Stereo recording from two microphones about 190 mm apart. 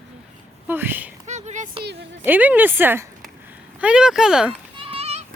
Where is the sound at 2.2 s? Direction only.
10° right (ahead or behind).